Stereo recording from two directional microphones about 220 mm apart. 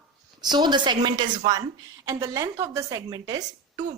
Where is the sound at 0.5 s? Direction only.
20° right (ahead or behind).